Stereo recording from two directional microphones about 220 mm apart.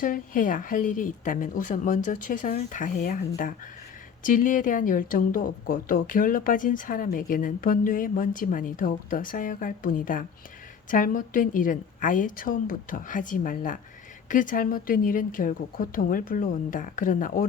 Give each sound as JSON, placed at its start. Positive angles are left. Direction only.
{"t": 0.0, "sound": "speech", "side_deg": 35}